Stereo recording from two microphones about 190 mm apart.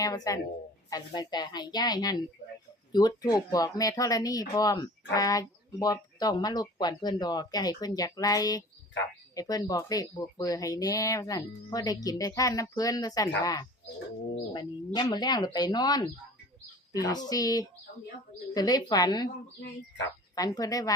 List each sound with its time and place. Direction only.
0.3 s speech: 20° left (ahead or behind)
20.3 s speech: 20° left (ahead or behind)